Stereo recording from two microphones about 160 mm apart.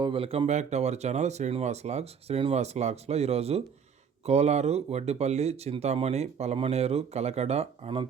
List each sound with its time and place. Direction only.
0.0 s speech: 35° right (ahead or behind)